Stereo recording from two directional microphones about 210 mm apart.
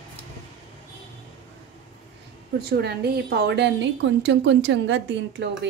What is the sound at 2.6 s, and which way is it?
Dishes, 50° right (ahead or behind).